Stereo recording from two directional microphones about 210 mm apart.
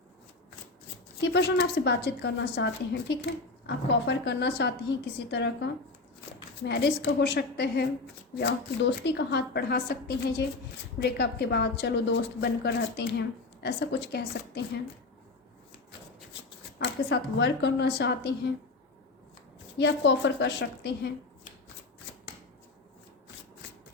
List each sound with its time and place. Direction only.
1.2 s a woman's voice: 55° left (ahead or behind)
6.7 s a woman's voice: 50° left (ahead or behind)
16.7 s a woman's voice: 55° left (ahead or behind)
19.8 s a woman's voice: 55° left (ahead or behind)